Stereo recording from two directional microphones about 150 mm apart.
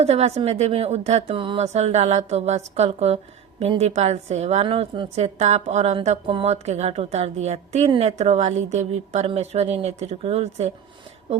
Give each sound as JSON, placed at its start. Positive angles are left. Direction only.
{"t": 0.0, "sound": "a woman's voice", "side_deg": -45}